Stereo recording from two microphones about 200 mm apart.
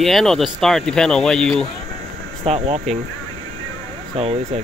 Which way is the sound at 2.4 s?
30° right (ahead or behind).